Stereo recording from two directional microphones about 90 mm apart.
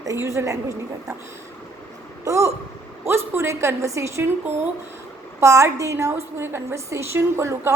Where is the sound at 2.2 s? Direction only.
35° right (ahead or behind).